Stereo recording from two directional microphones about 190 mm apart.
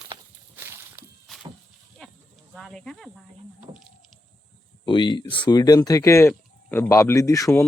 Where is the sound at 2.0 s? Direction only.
5° left (ahead or behind).